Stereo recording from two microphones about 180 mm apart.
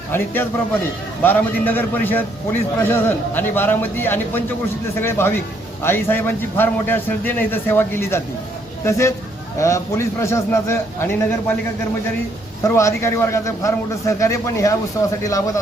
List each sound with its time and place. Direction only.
0.1 s a man's voice: 10° left (ahead or behind)
12.6 s a man's voice: 15° left (ahead or behind)